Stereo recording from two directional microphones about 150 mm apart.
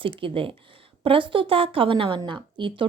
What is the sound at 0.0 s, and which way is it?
A woman's voice, 35° right (ahead or behind).